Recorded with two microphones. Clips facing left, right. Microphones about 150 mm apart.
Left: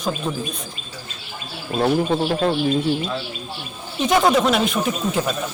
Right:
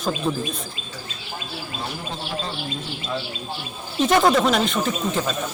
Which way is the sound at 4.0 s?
Centre (ahead or behind).